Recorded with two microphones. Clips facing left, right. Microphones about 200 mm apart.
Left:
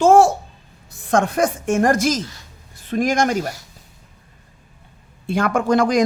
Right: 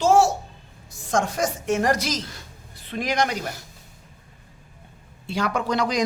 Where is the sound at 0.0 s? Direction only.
55° left (ahead or behind).